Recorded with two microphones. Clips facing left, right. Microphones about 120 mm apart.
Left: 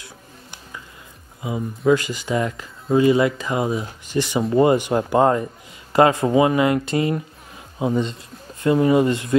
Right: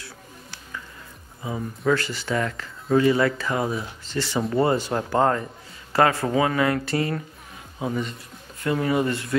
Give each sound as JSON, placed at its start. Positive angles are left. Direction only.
{"t": 1.9, "sound": "speech", "side_deg": 15}